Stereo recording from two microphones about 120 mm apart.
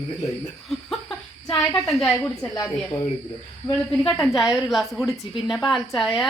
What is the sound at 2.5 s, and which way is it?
Speech, 30° left (ahead or behind).